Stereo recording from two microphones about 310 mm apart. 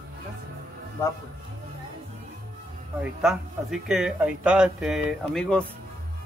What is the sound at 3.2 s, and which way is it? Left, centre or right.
Speech, centre.